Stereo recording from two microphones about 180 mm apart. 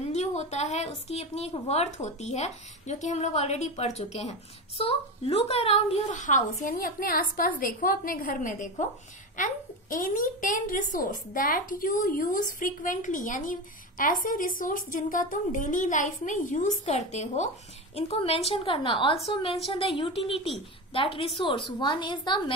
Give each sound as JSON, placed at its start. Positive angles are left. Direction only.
{"t": 0.0, "sound": "a woman's voice", "side_deg": 40}